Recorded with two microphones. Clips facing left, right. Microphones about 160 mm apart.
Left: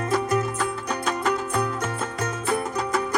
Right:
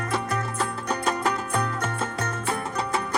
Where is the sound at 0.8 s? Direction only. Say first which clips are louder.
Right 1 dB; centre (ahead or behind).